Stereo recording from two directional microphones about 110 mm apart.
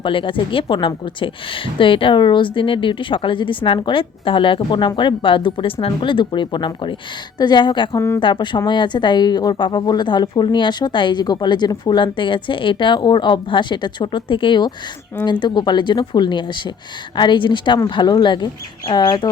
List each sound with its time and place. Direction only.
0.0 s a woman's voice: 50° left (ahead or behind)
7.9 s speech: 25° left (ahead or behind)
8.2 s a woman's voice: 45° left (ahead or behind)